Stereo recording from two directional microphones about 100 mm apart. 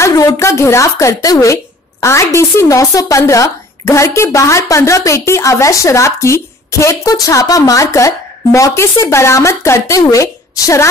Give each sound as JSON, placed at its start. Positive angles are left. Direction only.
{"t": 0.0, "sound": "speech", "side_deg": 35}